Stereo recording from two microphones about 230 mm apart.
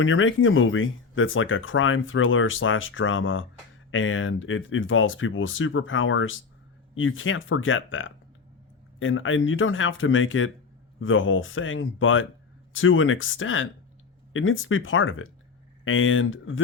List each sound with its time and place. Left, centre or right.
0.0 s speech: left